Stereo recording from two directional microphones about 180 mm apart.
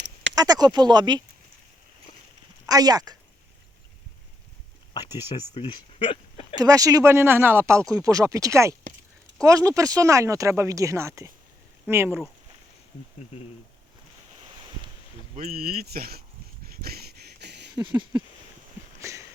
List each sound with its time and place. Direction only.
0.3 s speech: 20° right (ahead or behind)
2.6 s speech: 20° right (ahead or behind)
5.3 s speech: 30° left (ahead or behind)
6.6 s speech: 20° right (ahead or behind)
15.4 s speech: 55° right (ahead or behind)
16.6 s a sound: 55° right (ahead or behind)
17.7 s speech: 25° right (ahead or behind)
18.9 s a sound: 15° right (ahead or behind)